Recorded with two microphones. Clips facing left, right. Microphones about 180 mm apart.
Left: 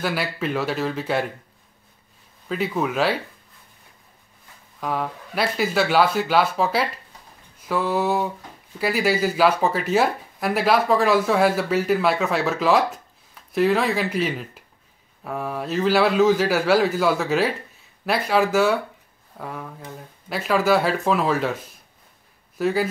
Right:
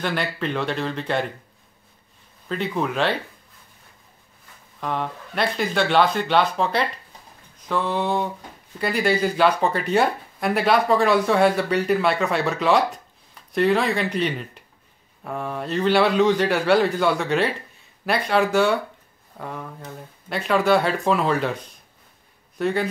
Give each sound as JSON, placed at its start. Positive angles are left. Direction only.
{"t": 0.0, "sound": "speech", "side_deg": 5}
{"t": 2.4, "sound": "speech", "side_deg": 5}
{"t": 4.7, "sound": "speech", "side_deg": 5}